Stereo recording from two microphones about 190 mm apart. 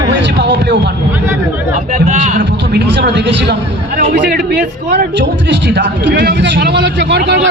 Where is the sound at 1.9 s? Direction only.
40° right (ahead or behind).